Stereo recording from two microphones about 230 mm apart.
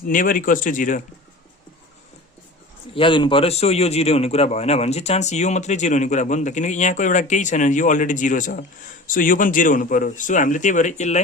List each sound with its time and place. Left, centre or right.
0.1 s a man's voice: left
2.9 s a man's voice: left